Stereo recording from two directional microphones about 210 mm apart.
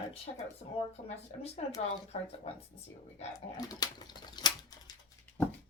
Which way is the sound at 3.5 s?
20° left (ahead or behind).